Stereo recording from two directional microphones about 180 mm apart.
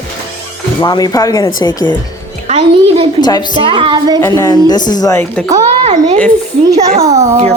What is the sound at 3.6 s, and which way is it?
Speech, 30° right (ahead or behind).